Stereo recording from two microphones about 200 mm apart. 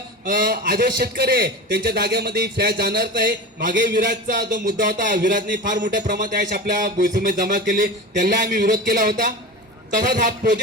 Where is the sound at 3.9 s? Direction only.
40° right (ahead or behind).